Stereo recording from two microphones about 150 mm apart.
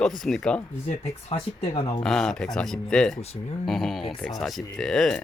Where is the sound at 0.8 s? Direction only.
45° left (ahead or behind).